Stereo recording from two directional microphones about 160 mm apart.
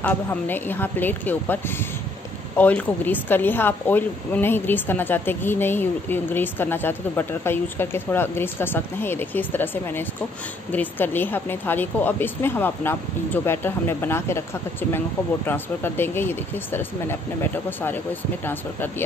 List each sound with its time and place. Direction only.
0.0 s speech: 10° left (ahead or behind)